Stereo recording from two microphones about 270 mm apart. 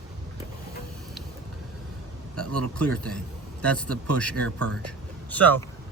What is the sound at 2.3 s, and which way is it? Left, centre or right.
Speech, right.